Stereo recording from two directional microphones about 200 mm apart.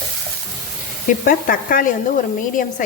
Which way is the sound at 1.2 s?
45° left (ahead or behind).